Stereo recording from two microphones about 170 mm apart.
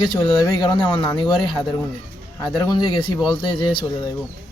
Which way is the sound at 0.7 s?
30° left (ahead or behind).